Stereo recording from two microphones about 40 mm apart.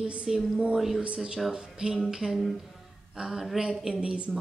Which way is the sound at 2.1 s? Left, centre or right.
Centre.